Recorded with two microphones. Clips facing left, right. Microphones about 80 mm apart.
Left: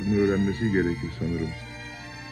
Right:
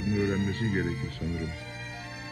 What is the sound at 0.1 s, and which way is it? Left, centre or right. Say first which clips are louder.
Speech: left 6 dB; left.